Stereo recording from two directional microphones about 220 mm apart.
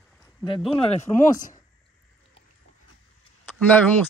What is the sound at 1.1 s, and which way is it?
Speech, 10° left (ahead or behind).